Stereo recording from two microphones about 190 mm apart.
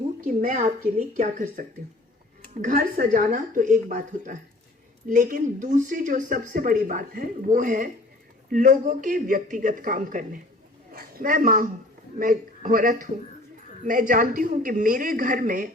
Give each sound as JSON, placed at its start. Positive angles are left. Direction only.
{"t": 0.3, "sound": "speech", "side_deg": -45}